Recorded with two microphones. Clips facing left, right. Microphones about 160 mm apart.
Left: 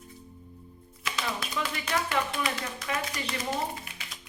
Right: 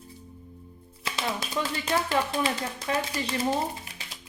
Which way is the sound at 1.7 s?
30° right (ahead or behind).